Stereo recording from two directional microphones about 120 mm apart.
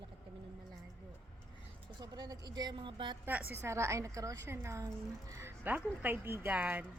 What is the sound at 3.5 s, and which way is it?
A woman's voice, 20° right (ahead or behind).